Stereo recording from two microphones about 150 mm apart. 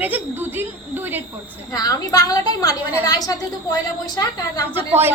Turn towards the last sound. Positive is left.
turn(degrees=-15)  # may be behind; listen again after turning